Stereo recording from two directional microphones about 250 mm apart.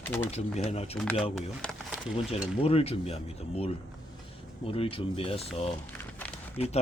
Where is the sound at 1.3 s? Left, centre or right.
Centre.